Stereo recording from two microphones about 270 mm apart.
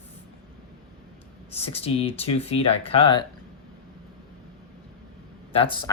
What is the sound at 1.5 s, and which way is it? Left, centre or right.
Speech, left.